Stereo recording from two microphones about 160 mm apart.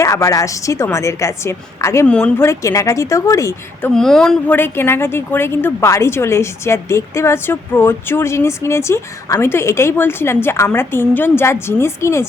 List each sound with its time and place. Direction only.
0.0 s a woman's voice: 20° left (ahead or behind)
3.9 s a woman's voice: 5° left (ahead or behind)